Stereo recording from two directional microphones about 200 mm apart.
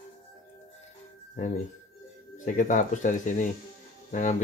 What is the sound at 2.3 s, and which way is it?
Speech, 40° left (ahead or behind).